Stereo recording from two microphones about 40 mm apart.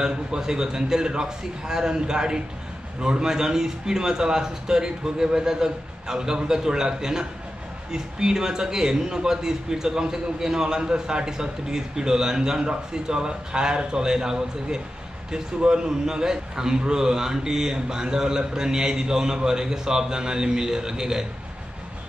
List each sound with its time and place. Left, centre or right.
0.0 s a man's voice: centre